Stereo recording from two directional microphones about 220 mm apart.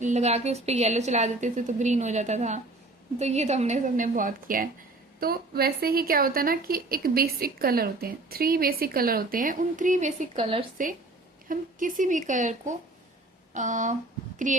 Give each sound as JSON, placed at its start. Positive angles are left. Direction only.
{"t": 0.0, "sound": "a woman's voice", "side_deg": -30}
{"t": 10.3, "sound": "speech", "side_deg": -25}
{"t": 11.4, "sound": "a woman's voice", "side_deg": -35}